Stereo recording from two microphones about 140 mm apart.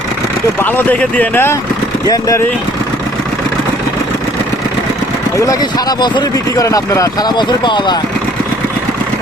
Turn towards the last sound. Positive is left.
turn(degrees=30)  # may be behind; listen again after turning